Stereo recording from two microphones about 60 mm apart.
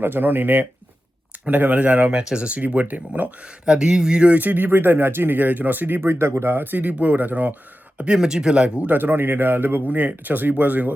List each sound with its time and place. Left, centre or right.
0.0 s speech: right; by 4.4 s centre
4.4 s speech: right
7.9 s speech: centre
9.0 s speech: right